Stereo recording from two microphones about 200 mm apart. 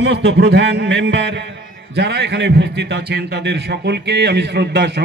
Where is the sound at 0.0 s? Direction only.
60° right (ahead or behind).